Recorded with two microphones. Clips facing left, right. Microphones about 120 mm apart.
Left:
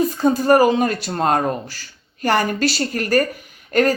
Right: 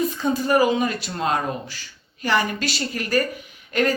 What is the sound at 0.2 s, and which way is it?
Speech, 45° left (ahead or behind).